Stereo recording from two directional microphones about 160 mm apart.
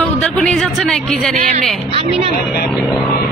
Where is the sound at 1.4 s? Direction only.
45° right (ahead or behind).